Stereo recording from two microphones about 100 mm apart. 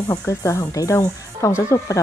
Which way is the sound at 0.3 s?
30° left (ahead or behind).